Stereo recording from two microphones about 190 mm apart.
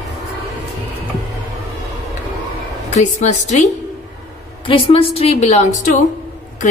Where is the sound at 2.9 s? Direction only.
35° left (ahead or behind).